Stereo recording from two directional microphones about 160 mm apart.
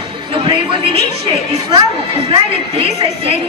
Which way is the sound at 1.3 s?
30° right (ahead or behind).